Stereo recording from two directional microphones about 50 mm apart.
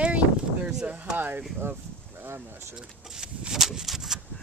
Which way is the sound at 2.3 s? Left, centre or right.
Right.